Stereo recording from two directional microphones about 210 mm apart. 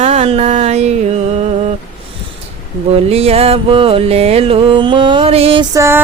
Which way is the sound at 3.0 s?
30° right (ahead or behind).